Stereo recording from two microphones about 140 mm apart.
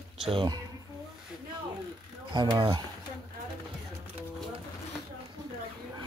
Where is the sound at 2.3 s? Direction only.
35° right (ahead or behind).